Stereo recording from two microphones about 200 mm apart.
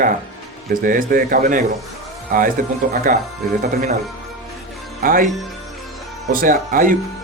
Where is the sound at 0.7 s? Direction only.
45° right (ahead or behind).